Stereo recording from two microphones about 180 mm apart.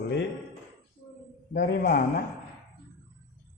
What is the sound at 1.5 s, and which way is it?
Speech, 60° left (ahead or behind).